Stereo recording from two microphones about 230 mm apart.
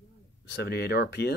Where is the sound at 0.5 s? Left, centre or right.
Left.